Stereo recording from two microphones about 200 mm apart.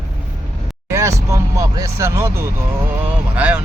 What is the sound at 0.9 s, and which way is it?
Speech, 15° right (ahead or behind).